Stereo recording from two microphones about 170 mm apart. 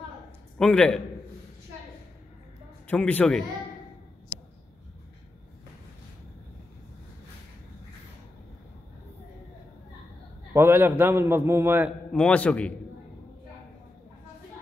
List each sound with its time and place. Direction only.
0.6 s a man's voice: 5° left (ahead or behind)
2.9 s a man's voice: 10° left (ahead or behind)
10.5 s a man's voice: 15° right (ahead or behind)
12.1 s a man's voice: 5° left (ahead or behind)